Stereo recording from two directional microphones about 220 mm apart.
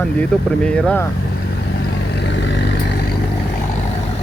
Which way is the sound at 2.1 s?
55° left (ahead or behind).